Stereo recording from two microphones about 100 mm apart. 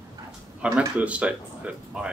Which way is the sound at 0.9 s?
15° right (ahead or behind).